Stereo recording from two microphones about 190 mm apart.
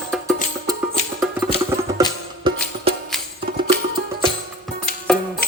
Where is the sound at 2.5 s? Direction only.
25° right (ahead or behind).